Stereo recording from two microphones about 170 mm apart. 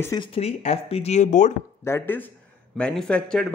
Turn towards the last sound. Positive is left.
turn(degrees=5)  # may be behind; listen again after turning